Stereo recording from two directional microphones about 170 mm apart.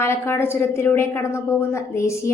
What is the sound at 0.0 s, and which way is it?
A woman's voice, 15° left (ahead or behind).